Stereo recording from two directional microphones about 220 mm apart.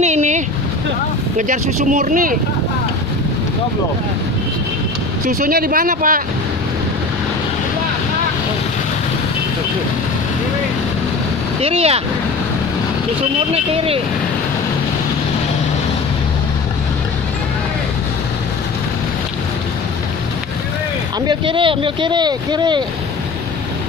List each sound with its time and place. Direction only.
0.0 s vehicle: 30° right (ahead or behind)
1.5 s speech: 35° right (ahead or behind)
5.2 s speech: 40° right (ahead or behind)
11.6 s speech: 25° right (ahead or behind)
21.3 s speech: 25° right (ahead or behind)